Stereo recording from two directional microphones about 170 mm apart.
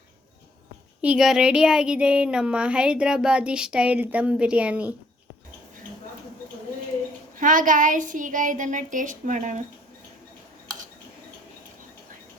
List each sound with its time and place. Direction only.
1.0 s speech: 5° right (ahead or behind)
7.3 s a child's voice: 50° right (ahead or behind)